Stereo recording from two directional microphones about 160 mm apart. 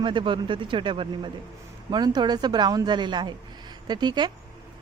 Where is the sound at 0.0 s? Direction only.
30° right (ahead or behind).